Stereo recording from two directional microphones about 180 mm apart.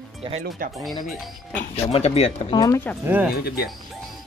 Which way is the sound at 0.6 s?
50° right (ahead or behind).